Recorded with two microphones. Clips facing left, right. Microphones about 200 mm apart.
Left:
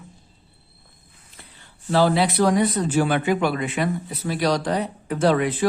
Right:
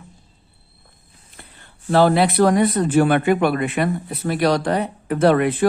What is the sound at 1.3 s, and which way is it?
Speech, 55° right (ahead or behind).